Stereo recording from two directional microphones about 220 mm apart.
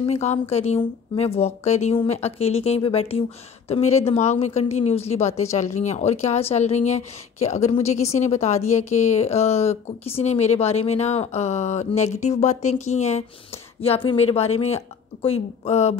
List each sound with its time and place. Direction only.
0.0 s speech: 30° left (ahead or behind)